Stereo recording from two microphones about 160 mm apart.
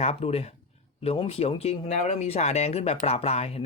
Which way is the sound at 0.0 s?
40° left (ahead or behind).